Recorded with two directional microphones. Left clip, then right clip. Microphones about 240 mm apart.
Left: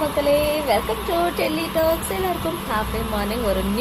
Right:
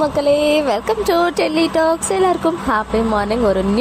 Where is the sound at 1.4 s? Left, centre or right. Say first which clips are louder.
Right 6 dB; right.